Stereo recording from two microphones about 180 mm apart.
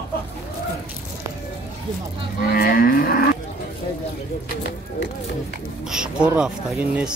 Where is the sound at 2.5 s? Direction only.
55° left (ahead or behind).